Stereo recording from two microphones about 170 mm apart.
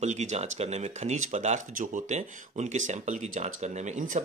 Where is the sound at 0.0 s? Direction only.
45° right (ahead or behind).